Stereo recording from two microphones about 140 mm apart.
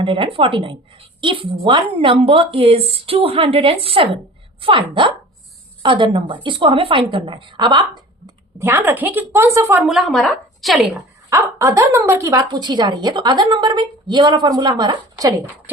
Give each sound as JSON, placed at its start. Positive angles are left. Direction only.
{"t": 0.0, "sound": "a woman's voice", "side_deg": -40}
{"t": 8.5, "sound": "a woman's voice", "side_deg": -15}
{"t": 9.8, "sound": "a woman's voice", "side_deg": 0}
{"t": 11.3, "sound": "a woman's voice", "side_deg": -20}